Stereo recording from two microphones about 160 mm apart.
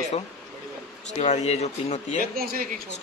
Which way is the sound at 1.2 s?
45° left (ahead or behind).